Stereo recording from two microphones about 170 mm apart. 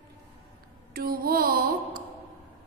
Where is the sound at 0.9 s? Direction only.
60° right (ahead or behind).